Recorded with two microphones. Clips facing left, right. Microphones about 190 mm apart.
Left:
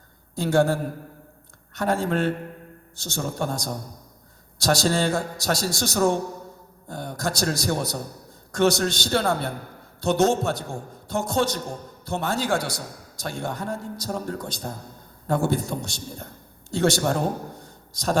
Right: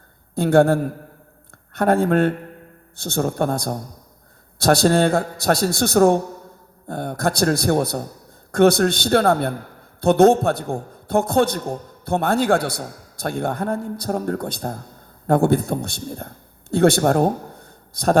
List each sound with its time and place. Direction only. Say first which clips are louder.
0.3 s a man's voice: right 6 dB; 60° right (ahead or behind)